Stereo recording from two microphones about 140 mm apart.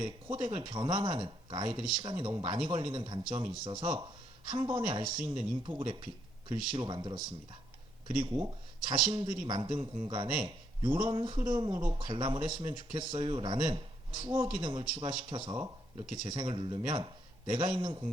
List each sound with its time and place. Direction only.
0.0 s speech: 35° right (ahead or behind)
8.9 s speech: 35° right (ahead or behind)